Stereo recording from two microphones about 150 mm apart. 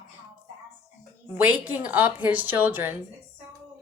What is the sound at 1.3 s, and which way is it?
Speech, 10° right (ahead or behind).